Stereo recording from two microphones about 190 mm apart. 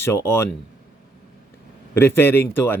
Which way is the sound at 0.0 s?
15° left (ahead or behind).